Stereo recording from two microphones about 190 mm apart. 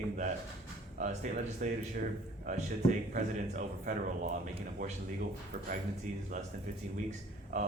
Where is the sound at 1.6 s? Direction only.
40° right (ahead or behind).